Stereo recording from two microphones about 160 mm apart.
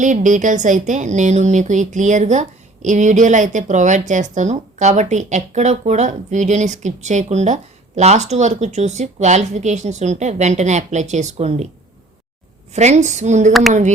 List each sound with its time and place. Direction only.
0.0 s speech: 50° right (ahead or behind)
12.7 s speech: 45° right (ahead or behind)